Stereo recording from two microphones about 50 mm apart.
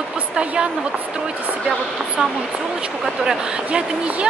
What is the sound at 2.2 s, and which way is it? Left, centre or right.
Speech, centre.